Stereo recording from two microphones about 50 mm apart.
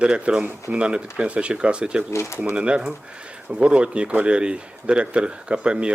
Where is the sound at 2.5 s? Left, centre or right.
Right.